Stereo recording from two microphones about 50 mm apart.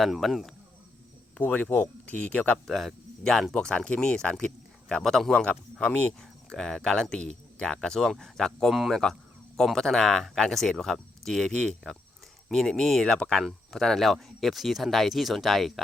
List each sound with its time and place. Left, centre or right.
0.0 s speech: centre
1.4 s speech: left
2.6 s speech: centre
5.0 s speech: centre
5.3 s speech: centre
6.1 s speech: centre